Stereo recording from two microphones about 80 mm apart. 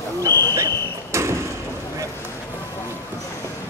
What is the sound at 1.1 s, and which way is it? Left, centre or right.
Sliding door, right.